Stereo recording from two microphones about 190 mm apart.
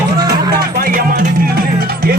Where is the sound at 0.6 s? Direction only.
50° right (ahead or behind).